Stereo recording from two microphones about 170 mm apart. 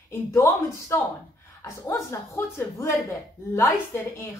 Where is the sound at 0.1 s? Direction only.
15° left (ahead or behind).